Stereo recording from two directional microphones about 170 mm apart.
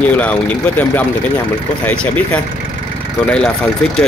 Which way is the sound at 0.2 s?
10° left (ahead or behind).